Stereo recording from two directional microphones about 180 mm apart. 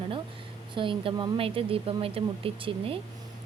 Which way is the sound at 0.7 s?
30° right (ahead or behind).